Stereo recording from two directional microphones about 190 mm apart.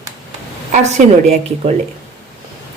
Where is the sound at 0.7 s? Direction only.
40° right (ahead or behind).